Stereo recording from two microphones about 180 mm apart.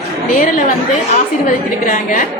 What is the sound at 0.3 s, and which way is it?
A woman's voice, 50° left (ahead or behind).